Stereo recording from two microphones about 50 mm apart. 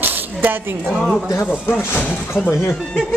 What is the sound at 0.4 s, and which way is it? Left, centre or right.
Speech, right.